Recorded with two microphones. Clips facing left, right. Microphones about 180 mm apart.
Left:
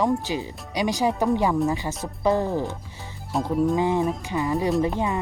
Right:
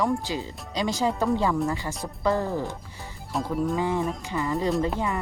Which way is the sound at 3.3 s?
Centre (ahead or behind).